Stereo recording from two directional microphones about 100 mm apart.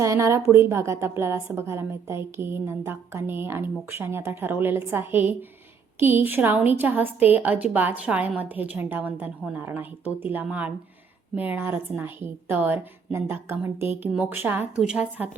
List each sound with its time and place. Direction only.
0.0 s a woman's voice: 30° right (ahead or behind); by 15.3 s 10° right (ahead or behind)